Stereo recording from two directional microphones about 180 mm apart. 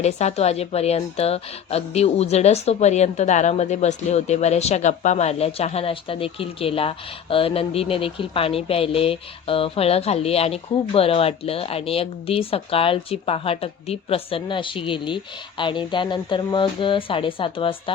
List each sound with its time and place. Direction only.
0.0 s a woman's voice: 35° left (ahead or behind)